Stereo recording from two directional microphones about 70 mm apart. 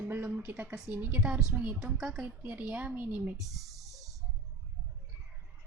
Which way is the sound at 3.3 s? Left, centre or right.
Centre.